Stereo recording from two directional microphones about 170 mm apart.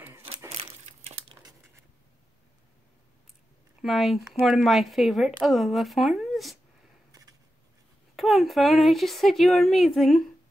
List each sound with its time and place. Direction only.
0.6 s crumpling: 40° right (ahead or behind)
3.8 s speech: centre (ahead or behind)
7.1 s a sound: 20° right (ahead or behind)
8.2 s speech: centre (ahead or behind)